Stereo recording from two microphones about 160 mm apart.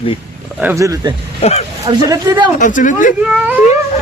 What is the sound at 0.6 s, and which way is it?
Speech, 20° right (ahead or behind).